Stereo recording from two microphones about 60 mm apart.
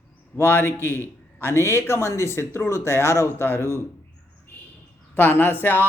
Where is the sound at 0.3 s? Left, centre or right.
Left.